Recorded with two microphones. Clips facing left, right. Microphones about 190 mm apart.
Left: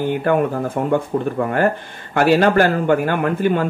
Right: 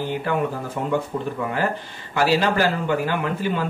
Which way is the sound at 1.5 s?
55° left (ahead or behind).